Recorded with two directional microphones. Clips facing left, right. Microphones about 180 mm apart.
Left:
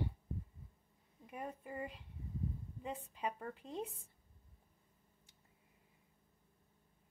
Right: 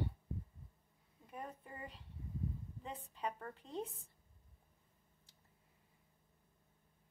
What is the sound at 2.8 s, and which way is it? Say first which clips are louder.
Speech: left 3 dB; 10° left (ahead or behind).